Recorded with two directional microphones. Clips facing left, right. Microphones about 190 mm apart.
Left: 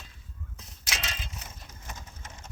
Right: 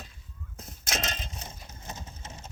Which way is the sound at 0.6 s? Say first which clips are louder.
Right 5 dB; 45° right (ahead or behind).